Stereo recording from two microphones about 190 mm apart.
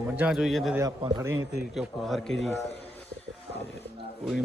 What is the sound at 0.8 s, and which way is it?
Speech, 20° right (ahead or behind).